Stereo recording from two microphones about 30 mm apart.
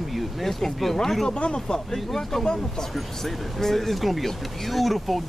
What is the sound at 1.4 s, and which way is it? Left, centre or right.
Speech, left.